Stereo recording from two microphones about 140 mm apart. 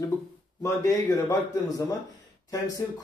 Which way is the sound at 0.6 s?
20° left (ahead or behind).